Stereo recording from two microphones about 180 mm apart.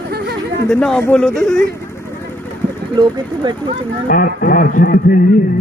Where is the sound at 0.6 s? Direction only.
5° left (ahead or behind).